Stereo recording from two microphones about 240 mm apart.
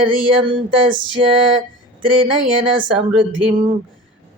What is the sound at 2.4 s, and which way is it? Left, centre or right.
Speech, right.